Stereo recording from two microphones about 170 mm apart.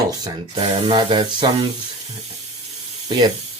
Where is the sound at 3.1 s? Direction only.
25° right (ahead or behind).